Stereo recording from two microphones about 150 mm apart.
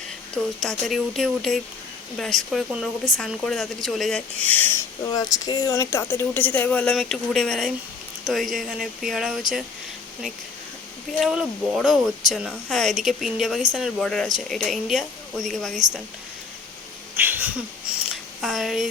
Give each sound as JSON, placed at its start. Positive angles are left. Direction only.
{"t": 0.3, "sound": "speech", "side_deg": 0}
{"t": 5.0, "sound": "speech", "side_deg": 25}
{"t": 11.2, "sound": "speech", "side_deg": -5}
{"t": 17.2, "sound": "speech", "side_deg": -10}